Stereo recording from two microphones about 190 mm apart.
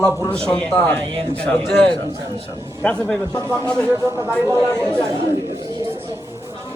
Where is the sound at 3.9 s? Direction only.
15° right (ahead or behind).